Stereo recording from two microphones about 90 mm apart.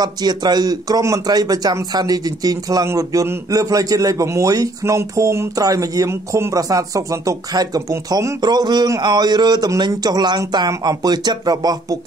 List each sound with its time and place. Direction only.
0.0 s a man's voice: 50° right (ahead or behind)
8.4 s speech: 50° right (ahead or behind)